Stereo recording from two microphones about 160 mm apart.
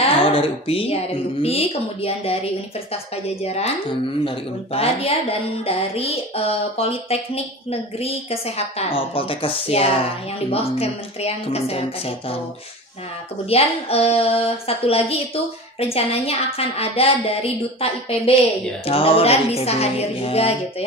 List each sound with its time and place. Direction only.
0.0 s a sound: 35° left (ahead or behind)
1.4 s a woman's voice: 40° left (ahead or behind)
4.3 s a woman's voice: 40° left (ahead or behind)
13.5 s a woman's voice: 40° left (ahead or behind)